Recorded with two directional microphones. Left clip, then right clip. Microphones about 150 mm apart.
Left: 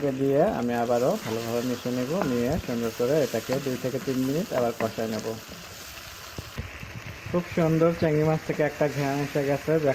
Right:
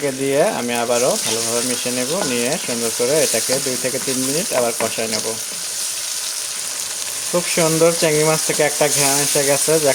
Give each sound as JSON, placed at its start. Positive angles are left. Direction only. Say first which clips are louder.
{"t": 0.0, "sound": "speech", "louder": "right 6 dB", "side_deg": -55}
{"t": 7.3, "sound": "speech", "louder": "right 8 dB", "side_deg": -35}